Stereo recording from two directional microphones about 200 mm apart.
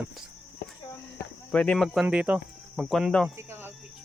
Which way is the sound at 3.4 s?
10° right (ahead or behind).